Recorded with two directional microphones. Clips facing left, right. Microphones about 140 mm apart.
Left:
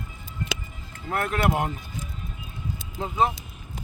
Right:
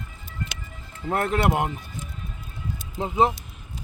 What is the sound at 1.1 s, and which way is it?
Speech, 25° right (ahead or behind).